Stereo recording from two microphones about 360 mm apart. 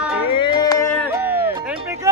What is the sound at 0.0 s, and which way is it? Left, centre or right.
Music, centre.